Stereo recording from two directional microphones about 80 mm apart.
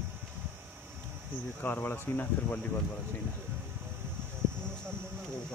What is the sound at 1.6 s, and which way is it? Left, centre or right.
Speech, left.